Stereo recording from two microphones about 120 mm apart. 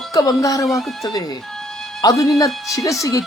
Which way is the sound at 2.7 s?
25° left (ahead or behind).